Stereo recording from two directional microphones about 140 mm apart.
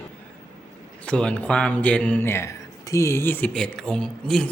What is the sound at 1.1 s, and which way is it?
Speech, 10° left (ahead or behind).